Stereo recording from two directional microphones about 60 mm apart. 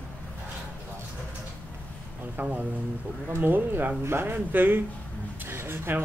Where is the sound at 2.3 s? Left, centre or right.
Right.